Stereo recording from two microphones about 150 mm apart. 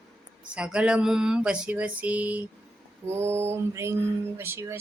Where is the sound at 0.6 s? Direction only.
5° right (ahead or behind).